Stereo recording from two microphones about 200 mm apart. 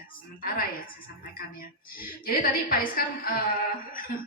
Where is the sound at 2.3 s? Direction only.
45° left (ahead or behind).